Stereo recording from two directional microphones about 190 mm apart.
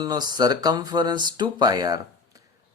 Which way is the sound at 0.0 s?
20° right (ahead or behind).